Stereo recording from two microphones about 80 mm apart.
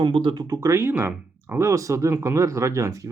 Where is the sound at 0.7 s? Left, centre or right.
Right.